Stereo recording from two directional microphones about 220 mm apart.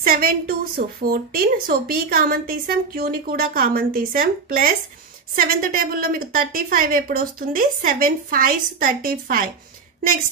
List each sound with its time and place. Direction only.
0.0 s a woman's voice: 40° right (ahead or behind)